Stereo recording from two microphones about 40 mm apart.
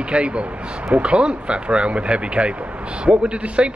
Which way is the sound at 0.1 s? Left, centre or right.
Right.